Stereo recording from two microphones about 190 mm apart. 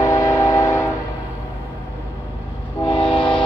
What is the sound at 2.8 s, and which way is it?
Train, 30° left (ahead or behind).